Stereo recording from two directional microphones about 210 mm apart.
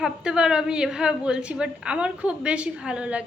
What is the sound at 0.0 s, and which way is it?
A woman's voice, 5° right (ahead or behind).